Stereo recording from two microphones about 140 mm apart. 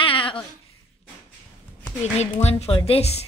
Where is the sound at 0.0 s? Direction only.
40° left (ahead or behind).